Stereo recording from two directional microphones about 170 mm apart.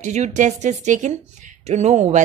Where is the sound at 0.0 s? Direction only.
45° right (ahead or behind).